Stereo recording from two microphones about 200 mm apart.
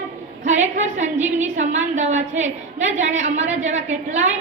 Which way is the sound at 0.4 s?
35° right (ahead or behind).